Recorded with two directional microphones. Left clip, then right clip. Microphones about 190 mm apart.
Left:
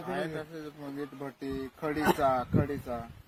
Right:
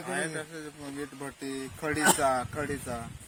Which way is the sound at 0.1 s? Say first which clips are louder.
Right 2 dB; 10° left (ahead or behind).